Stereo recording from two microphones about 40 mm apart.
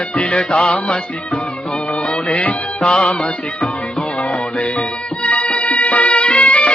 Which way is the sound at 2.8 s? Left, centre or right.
Left.